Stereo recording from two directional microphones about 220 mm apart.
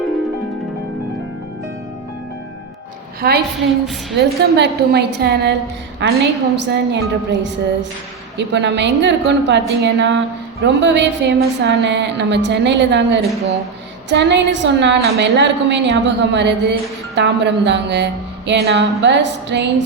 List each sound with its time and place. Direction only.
3.2 s a woman's voice: 45° right (ahead or behind)
6.6 s a woman's voice: 50° right (ahead or behind)